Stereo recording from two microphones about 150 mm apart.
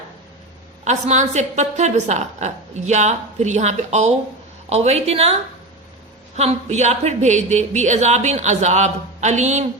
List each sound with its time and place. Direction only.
0.9 s a woman's voice: 50° right (ahead or behind)